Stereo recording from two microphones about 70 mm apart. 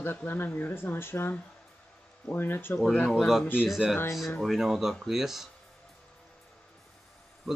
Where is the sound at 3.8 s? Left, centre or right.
Centre.